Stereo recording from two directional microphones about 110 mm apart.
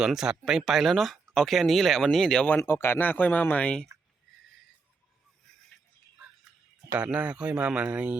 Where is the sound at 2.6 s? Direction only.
20° left (ahead or behind).